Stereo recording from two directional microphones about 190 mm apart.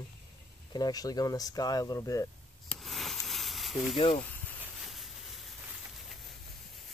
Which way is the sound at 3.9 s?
30° left (ahead or behind).